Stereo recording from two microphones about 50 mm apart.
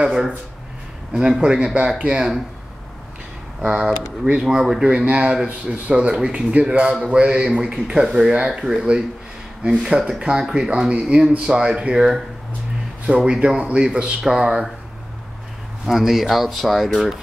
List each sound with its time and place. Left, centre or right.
1.4 s speech: centre
3.6 s speech: centre
4.8 s speech: right
11.9 s speech: centre
15.8 s speech: centre